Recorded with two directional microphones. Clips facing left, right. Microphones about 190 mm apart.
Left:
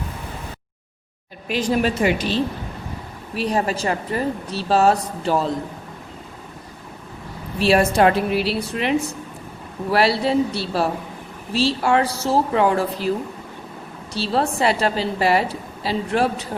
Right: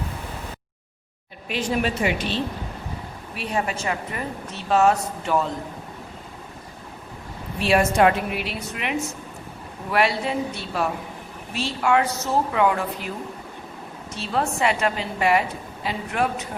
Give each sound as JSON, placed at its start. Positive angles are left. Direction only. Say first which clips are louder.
{"t": 1.5, "sound": "a woman's voice", "louder": "left 4 dB", "side_deg": 40}
{"t": 7.6, "sound": "a woman's voice", "louder": "left 2 dB", "side_deg": 35}
{"t": 14.1, "sound": "a woman's voice", "louder": "left 4 dB", "side_deg": 35}